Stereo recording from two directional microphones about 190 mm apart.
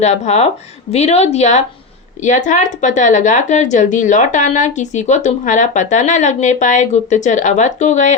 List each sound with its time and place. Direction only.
0.0 s speech: 35° left (ahead or behind)